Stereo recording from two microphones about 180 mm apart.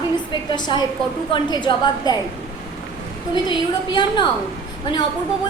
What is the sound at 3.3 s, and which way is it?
Speech, 25° left (ahead or behind).